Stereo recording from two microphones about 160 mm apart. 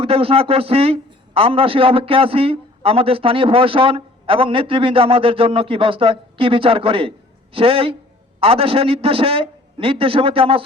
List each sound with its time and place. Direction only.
0.0 s a man's voice: 35° right (ahead or behind)